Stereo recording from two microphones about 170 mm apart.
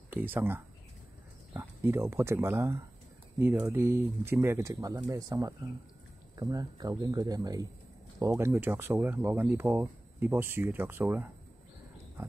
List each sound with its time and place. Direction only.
0.3 s speech: 15° right (ahead or behind)
12.2 s dog: 10° right (ahead or behind)